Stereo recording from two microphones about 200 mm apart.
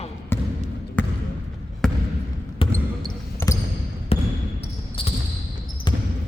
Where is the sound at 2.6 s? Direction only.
25° left (ahead or behind).